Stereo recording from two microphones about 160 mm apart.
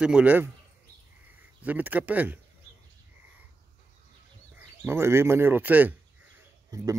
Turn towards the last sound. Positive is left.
turn(degrees=-20)  # may be behind; listen again after turning